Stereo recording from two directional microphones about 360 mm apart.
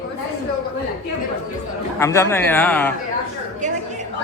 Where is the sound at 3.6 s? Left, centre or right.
Centre.